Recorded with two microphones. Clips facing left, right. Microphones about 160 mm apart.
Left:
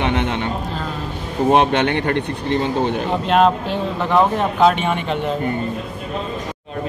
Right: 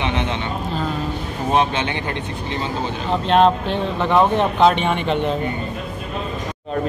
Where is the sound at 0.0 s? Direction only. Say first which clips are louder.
Left 3 dB; 55° left (ahead or behind).